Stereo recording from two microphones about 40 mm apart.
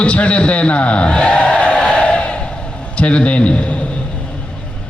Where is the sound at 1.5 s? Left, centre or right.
Left.